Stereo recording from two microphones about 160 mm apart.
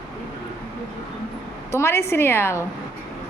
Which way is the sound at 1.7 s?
15° left (ahead or behind).